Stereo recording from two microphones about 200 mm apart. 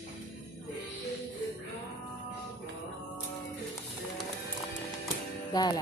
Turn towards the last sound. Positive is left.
turn(degrees=20)  # may be behind; listen again after turning